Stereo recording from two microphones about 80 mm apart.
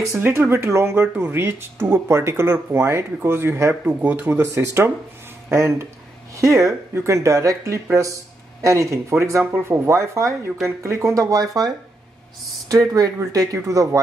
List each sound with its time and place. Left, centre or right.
0.2 s speech: right
3.8 s speech: right